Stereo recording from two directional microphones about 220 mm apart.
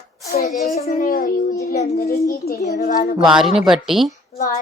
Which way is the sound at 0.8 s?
40° left (ahead or behind).